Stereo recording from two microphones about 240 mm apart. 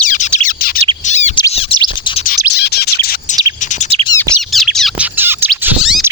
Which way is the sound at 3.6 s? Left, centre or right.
Left.